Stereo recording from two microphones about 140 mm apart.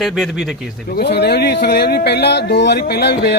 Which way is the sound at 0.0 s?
Centre (ahead or behind).